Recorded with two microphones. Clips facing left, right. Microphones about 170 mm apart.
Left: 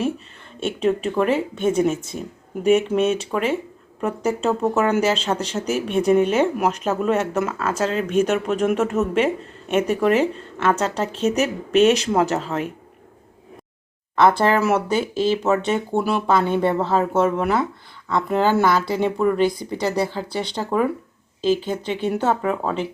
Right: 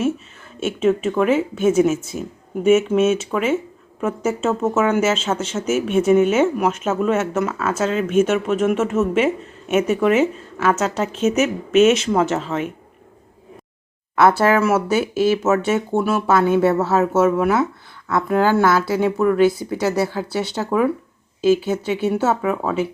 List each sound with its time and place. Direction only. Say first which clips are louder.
0.6 s speech: right 3 dB; 5° right (ahead or behind)
11.3 s speech: right 2 dB; 35° left (ahead or behind)
11.9 s speech: right 1 dB; centre (ahead or behind)
14.2 s speech: right 2 dB; 5° right (ahead or behind)